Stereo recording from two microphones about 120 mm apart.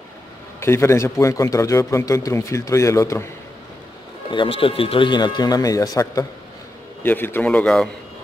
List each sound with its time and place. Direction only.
0.6 s a man's voice: 20° left (ahead or behind)
4.3 s speech: 45° left (ahead or behind); by 6.2 s 30° left (ahead or behind)
7.0 s a man's voice: 15° left (ahead or behind)